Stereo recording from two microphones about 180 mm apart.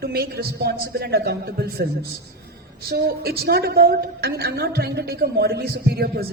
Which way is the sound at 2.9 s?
60° right (ahead or behind).